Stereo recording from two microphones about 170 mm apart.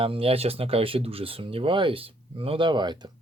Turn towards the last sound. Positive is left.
turn(degrees=-25)  # may be behind; listen again after turning